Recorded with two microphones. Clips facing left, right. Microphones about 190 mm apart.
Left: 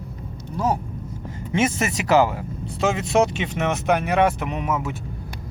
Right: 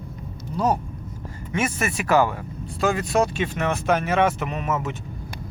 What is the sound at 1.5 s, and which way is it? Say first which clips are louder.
Speech: left 3 dB; 25° left (ahead or behind).